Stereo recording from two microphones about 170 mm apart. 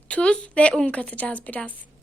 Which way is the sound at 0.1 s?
5° left (ahead or behind).